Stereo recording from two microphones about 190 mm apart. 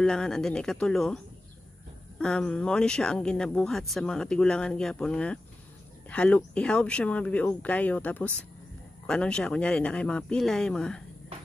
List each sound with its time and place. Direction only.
0.0 s speech: 5° left (ahead or behind)